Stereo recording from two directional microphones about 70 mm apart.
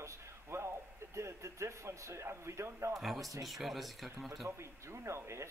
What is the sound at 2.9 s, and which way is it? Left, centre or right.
Speech, centre.